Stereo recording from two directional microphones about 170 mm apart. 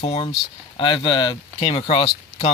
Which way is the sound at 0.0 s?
35° left (ahead or behind).